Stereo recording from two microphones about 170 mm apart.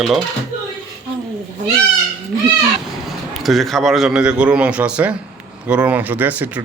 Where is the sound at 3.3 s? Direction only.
Centre (ahead or behind).